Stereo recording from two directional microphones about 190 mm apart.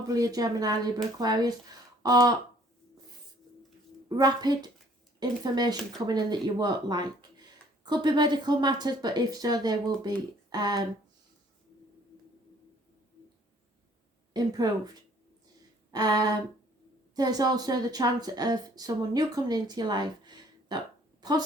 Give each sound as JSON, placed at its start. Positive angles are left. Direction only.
{"t": 0.1, "sound": "a woman's voice", "side_deg": -20}
{"t": 4.2, "sound": "a woman's voice", "side_deg": -20}
{"t": 14.3, "sound": "a woman's voice", "side_deg": -20}
{"t": 15.9, "sound": "a woman's voice", "side_deg": -20}
{"t": 21.2, "sound": "a sound", "side_deg": -20}